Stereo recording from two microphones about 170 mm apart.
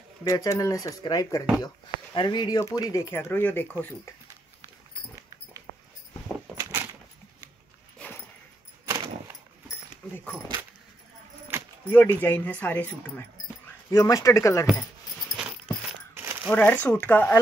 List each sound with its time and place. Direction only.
0.2 s speech: 20° left (ahead or behind)
6.4 s a sound: 20° right (ahead or behind)
11.5 s keys jangling: 15° right (ahead or behind)
11.9 s speech: 10° left (ahead or behind)
15.3 s a sound: 5° right (ahead or behind)
16.4 s speech: 10° left (ahead or behind)